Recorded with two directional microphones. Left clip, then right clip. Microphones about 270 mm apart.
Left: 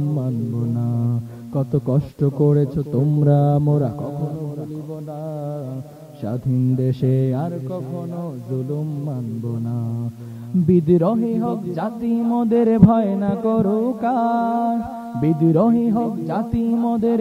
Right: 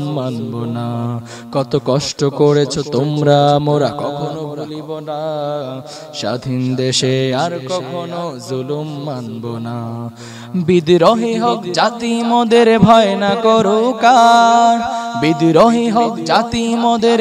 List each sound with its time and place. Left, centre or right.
1.5 s speech: right
2.5 s speech: centre
2.9 s speech: right
3.3 s speech: centre
3.5 s speech: right
5.2 s speech: right
6.8 s speech: centre
10.7 s speech: centre